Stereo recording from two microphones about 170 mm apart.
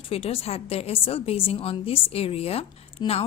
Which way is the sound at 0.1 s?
35° left (ahead or behind).